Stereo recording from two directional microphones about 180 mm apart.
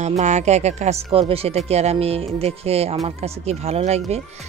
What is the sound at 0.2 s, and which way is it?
Speech, 40° right (ahead or behind).